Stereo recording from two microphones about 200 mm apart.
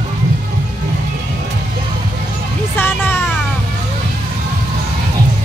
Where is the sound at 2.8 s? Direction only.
10° left (ahead or behind).